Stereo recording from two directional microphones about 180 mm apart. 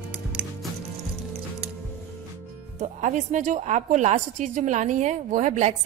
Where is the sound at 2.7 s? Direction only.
40° right (ahead or behind).